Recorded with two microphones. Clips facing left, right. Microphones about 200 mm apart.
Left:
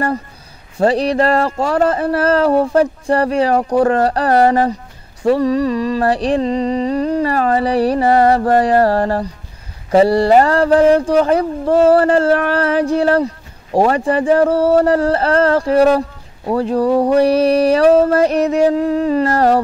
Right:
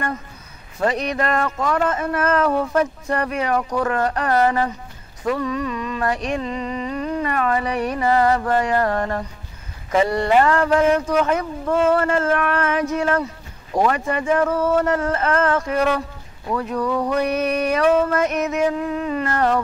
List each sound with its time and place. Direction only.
0.7 s speech: 30° left (ahead or behind)